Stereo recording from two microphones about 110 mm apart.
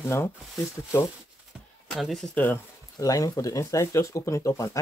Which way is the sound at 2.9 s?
30° left (ahead or behind).